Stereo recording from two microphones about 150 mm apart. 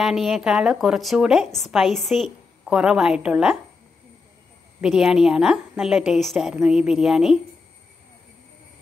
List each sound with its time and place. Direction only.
0.0 s a woman's voice: centre (ahead or behind)
4.8 s a woman's voice: centre (ahead or behind)